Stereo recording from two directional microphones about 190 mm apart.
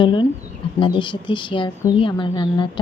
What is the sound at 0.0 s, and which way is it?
Speech, 25° left (ahead or behind).